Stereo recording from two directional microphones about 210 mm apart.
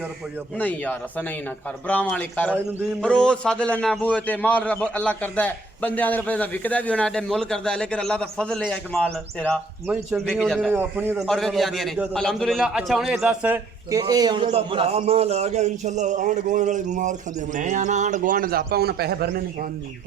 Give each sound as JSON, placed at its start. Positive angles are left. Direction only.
{"t": 0.6, "sound": "a man's voice", "side_deg": 5}
{"t": 9.8, "sound": "a man's voice", "side_deg": -5}
{"t": 10.7, "sound": "a man's voice", "side_deg": -10}
{"t": 11.3, "sound": "a man's voice", "side_deg": 0}
{"t": 14.0, "sound": "a man's voice", "side_deg": -20}